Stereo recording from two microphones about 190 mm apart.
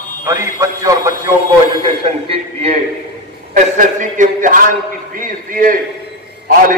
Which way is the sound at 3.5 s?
40° right (ahead or behind).